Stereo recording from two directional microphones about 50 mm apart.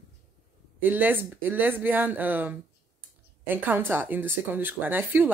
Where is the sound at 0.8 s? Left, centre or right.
Right.